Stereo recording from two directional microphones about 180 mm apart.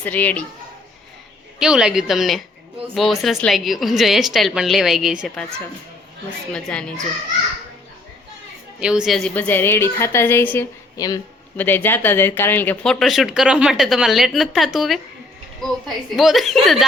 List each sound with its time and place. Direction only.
0.0 s a woman's voice: 10° left (ahead or behind)
1.5 s speech: 5° right (ahead or behind)
6.5 s speech: 5° left (ahead or behind)
8.8 s a woman's voice: 5° right (ahead or behind); by 11.2 s 20° left (ahead or behind)
11.5 s speech: 10° left (ahead or behind)
16.1 s speech: centre (ahead or behind)